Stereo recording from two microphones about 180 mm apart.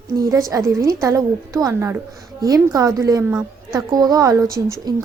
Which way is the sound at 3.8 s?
20° right (ahead or behind).